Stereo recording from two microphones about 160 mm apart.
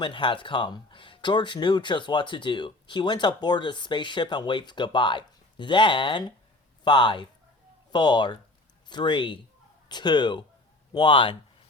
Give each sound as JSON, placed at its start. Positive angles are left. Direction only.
{"t": 0.0, "sound": "speech", "side_deg": 30}